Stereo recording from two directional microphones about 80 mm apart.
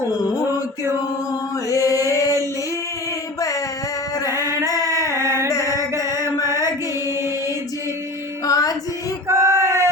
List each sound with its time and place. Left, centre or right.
1.7 s chant: left
5.5 s mantra: left
6.0 s chant: left
8.4 s music: left
9.3 s a sound: right